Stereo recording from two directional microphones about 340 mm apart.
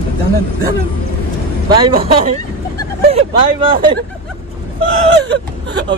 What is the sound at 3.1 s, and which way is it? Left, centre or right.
Speech, centre.